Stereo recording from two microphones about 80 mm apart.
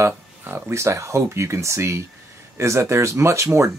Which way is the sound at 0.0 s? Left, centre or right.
Right.